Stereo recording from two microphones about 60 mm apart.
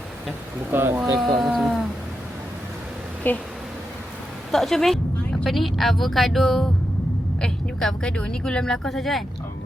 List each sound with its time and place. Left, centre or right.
0.7 s speech: right
1.2 s a woman's voice: centre
3.3 s speech: left
4.5 s a woman's voice: centre
7.4 s vehicle: centre
8.1 s speech: centre